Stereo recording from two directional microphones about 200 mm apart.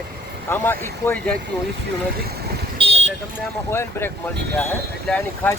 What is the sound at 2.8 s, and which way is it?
Vehicle, 25° right (ahead or behind).